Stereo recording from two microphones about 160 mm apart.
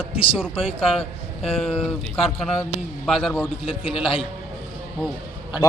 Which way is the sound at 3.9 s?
35° left (ahead or behind).